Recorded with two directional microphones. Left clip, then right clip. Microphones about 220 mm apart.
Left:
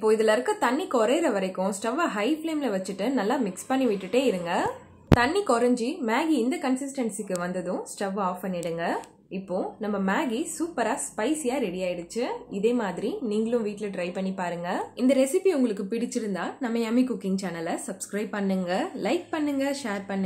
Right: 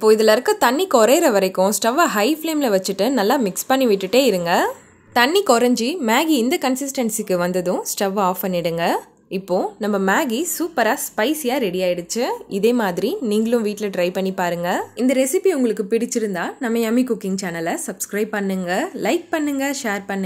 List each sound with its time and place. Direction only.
0.0 s a woman's voice: 40° right (ahead or behind)